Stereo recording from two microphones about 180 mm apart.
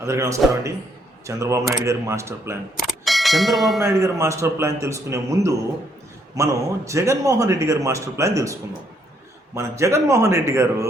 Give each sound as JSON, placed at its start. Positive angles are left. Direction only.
{"t": 0.0, "sound": "a man's voice", "side_deg": -15}
{"t": 2.7, "sound": "a sound", "side_deg": 0}
{"t": 4.0, "sound": "a man's voice", "side_deg": -15}
{"t": 9.6, "sound": "a man's voice", "side_deg": -15}